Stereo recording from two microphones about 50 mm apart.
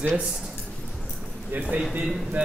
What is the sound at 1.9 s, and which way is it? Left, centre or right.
Speech, right.